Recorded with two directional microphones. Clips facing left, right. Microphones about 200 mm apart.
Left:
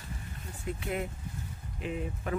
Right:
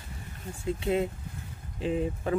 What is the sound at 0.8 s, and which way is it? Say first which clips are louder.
Speech: right 8 dB; 25° right (ahead or behind).